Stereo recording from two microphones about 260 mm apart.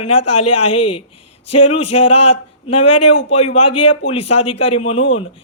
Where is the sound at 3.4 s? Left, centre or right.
Left.